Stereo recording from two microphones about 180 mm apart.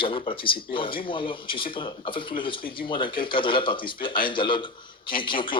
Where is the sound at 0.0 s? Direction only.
30° left (ahead or behind).